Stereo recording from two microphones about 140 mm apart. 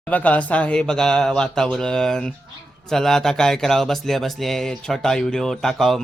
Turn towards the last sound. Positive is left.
turn(degrees=0)  # may be behind; listen again after turning